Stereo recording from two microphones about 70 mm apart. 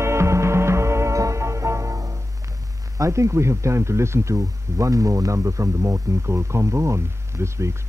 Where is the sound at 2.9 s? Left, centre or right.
Right.